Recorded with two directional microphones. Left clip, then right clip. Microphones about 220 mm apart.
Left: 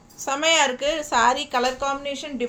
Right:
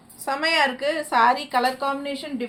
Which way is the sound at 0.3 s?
25° left (ahead or behind).